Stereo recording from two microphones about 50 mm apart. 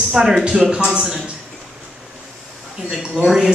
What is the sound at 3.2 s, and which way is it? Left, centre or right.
Speech, centre.